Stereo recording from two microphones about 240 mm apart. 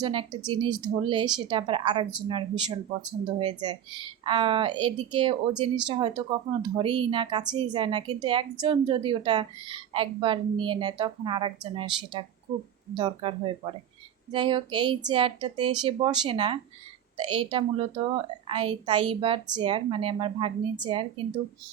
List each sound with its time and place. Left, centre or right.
0.0 s a woman's voice: right